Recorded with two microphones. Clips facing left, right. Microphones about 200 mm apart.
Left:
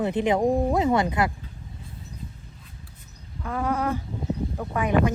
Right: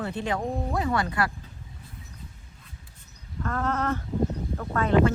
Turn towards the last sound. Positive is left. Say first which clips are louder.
# right 1 dB
turn(degrees=15)  # may be behind; listen again after turning